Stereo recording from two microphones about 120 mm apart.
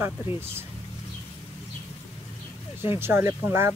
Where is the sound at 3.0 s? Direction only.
20° right (ahead or behind).